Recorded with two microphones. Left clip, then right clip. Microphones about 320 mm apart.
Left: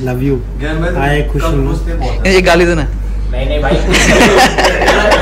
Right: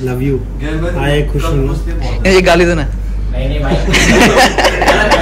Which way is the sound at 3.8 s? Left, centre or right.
Centre.